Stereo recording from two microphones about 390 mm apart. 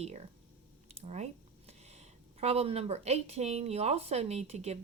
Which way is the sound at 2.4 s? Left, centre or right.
Centre.